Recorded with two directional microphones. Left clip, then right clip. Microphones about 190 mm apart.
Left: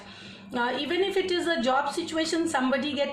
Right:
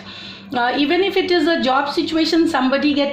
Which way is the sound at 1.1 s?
35° right (ahead or behind).